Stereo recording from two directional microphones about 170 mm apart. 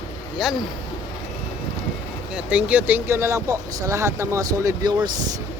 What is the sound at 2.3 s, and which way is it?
Speech, 5° right (ahead or behind).